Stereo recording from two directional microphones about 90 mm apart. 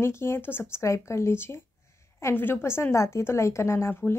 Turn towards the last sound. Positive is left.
turn(degrees=25)  # may be behind; listen again after turning